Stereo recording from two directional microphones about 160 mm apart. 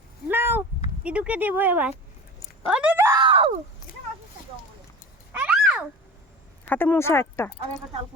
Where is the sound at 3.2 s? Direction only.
35° right (ahead or behind).